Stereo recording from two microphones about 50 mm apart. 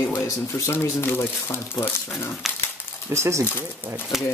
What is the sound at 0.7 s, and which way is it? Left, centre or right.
Speech, left.